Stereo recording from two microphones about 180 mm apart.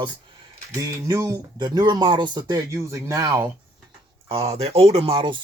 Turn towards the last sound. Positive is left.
turn(degrees=-30)  # may be behind; listen again after turning